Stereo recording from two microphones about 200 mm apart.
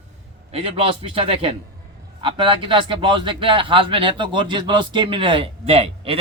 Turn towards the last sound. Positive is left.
turn(degrees=-30)  # may be behind; listen again after turning